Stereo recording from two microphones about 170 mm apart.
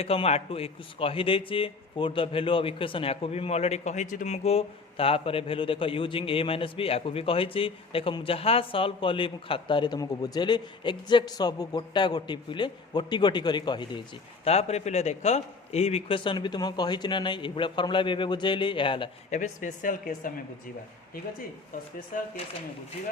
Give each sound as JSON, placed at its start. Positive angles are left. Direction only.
{"t": 0.0, "sound": "speech", "side_deg": 35}
{"t": 14.4, "sound": "a man's voice", "side_deg": 35}
{"t": 19.3, "sound": "speech", "side_deg": 45}
{"t": 22.1, "sound": "speech", "side_deg": 55}